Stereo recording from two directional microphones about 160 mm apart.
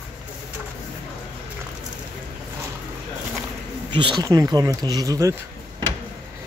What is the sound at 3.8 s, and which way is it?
Speech, 30° right (ahead or behind).